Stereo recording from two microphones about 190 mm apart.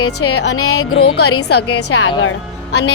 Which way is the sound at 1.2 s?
75° left (ahead or behind).